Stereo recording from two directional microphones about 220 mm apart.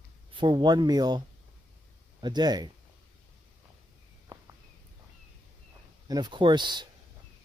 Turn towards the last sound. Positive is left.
turn(degrees=-20)  # may be behind; listen again after turning